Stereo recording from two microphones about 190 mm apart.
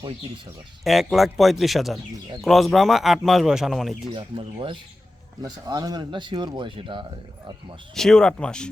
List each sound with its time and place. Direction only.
0.9 s speech: centre (ahead or behind)
4.1 s speech: 25° right (ahead or behind)
7.9 s speech: 5° left (ahead or behind)